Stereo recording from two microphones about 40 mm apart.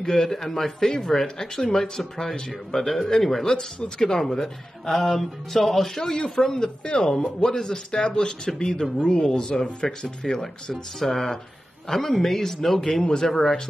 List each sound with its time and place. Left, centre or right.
0.0 s speech: centre